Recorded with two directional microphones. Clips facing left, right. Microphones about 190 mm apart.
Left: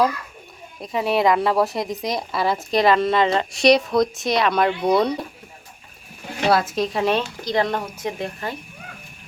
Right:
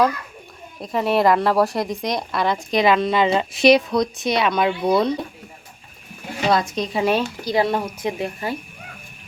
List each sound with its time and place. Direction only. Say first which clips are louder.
0.8 s speech: right 1 dB; centre (ahead or behind)
6.5 s a woman's voice: left 1 dB; 5° left (ahead or behind); by 8.5 s 10° right (ahead or behind)